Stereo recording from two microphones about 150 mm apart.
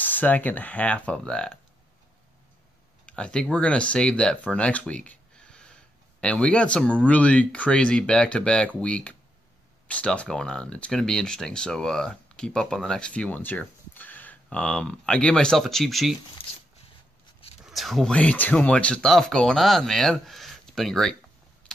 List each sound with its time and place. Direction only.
0.0 s speech: 10° left (ahead or behind)
3.1 s speech: 5° left (ahead or behind)
17.6 s speech: centre (ahead or behind)
21.7 s vehicle: 5° left (ahead or behind)